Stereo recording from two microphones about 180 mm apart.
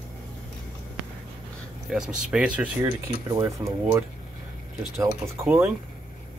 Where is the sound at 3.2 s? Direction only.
20° right (ahead or behind).